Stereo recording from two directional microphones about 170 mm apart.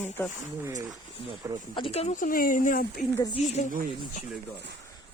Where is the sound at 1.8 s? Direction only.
35° left (ahead or behind).